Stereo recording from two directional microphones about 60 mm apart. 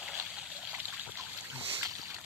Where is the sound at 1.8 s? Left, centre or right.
Right.